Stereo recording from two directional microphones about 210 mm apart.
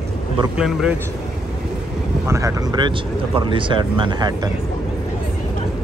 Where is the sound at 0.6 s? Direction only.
5° right (ahead or behind).